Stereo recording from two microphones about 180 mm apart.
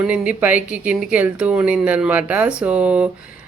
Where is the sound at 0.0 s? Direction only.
5° right (ahead or behind).